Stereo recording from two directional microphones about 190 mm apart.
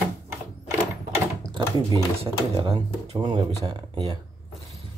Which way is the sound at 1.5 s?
25° right (ahead or behind).